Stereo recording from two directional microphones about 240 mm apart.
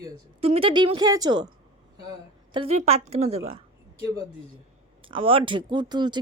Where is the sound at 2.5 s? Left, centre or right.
Right.